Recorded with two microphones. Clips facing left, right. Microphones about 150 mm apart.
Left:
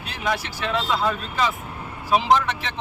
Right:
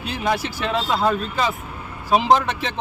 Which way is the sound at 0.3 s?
35° right (ahead or behind).